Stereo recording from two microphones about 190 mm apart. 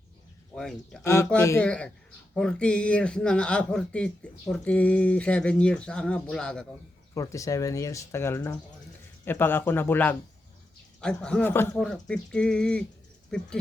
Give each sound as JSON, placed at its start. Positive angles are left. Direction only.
{"t": 0.5, "sound": "speech", "side_deg": 5}
{"t": 1.0, "sound": "speech", "side_deg": 15}
{"t": 7.1, "sound": "speech", "side_deg": 15}